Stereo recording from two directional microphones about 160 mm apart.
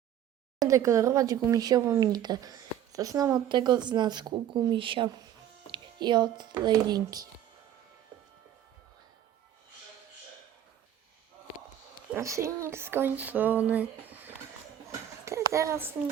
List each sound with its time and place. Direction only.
0.6 s speech: 20° right (ahead or behind)
12.1 s speech: 20° right (ahead or behind)
14.8 s a sound: 20° right (ahead or behind)